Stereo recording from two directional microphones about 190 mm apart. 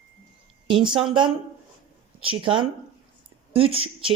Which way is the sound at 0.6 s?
25° right (ahead or behind).